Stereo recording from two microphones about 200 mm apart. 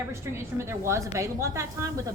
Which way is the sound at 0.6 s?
15° right (ahead or behind).